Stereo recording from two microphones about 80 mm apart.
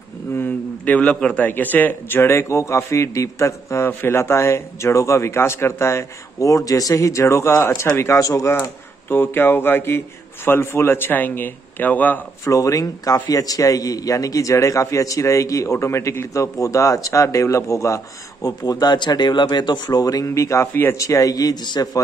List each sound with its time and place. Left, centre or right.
0.3 s a man's voice: left
9.1 s a man's voice: left
12.4 s a man's voice: left
20.7 s a man's voice: left
21.0 s a man's voice: left